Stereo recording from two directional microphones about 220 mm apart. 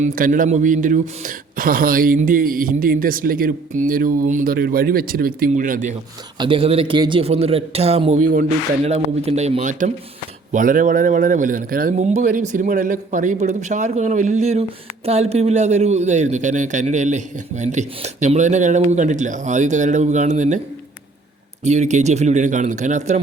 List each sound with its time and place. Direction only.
0.0 s a man's voice: 35° right (ahead or behind)
6.4 s a man's voice: 25° right (ahead or behind)
21.6 s a man's voice: 30° right (ahead or behind)